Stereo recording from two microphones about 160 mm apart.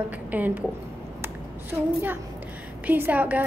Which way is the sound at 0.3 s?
10° right (ahead or behind).